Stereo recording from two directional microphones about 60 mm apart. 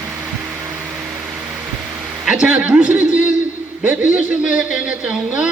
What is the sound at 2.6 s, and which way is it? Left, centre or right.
A man's voice, centre.